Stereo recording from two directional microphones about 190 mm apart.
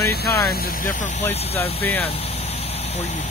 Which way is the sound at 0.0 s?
15° left (ahead or behind).